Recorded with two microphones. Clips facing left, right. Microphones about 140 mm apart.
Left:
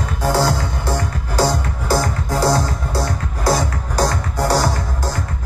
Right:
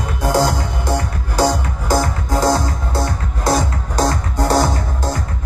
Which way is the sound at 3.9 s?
25° right (ahead or behind).